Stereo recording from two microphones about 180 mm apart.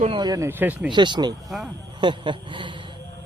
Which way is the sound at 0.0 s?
30° right (ahead or behind).